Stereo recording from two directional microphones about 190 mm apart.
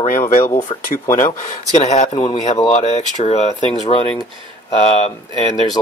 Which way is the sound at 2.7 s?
35° left (ahead or behind).